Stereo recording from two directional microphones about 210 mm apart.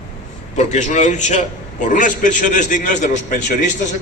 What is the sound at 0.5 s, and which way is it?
A man's voice, 35° left (ahead or behind).